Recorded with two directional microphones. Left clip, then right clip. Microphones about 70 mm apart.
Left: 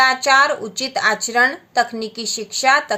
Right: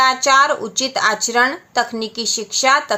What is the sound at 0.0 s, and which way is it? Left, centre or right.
A woman's voice, right.